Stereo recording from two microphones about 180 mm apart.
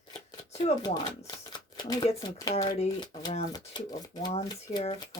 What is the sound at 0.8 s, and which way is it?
Speech, 25° left (ahead or behind).